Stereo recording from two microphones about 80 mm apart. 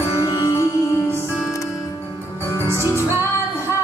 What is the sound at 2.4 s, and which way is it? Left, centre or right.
Music, right.